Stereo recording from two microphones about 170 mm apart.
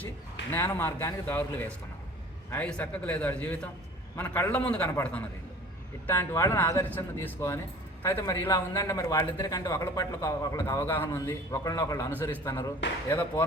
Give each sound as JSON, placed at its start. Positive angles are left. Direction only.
{"t": 0.5, "sound": "a man's voice", "side_deg": 15}